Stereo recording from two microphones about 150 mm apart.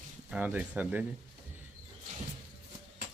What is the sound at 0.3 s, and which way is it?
Speech, 10° right (ahead or behind).